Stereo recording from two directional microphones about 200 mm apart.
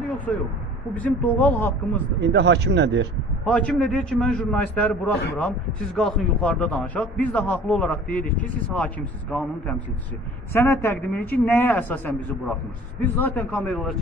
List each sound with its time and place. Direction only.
0.3 s a man's voice: 10° left (ahead or behind)
2.1 s speech: 60° right (ahead or behind)
3.4 s a man's voice: 5° left (ahead or behind)